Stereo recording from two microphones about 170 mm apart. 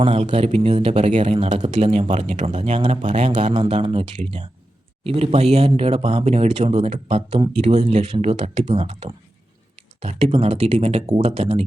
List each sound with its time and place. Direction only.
0.0 s speech: 35° right (ahead or behind)
3.7 s speech: 30° right (ahead or behind)
4.2 s speech: 45° right (ahead or behind)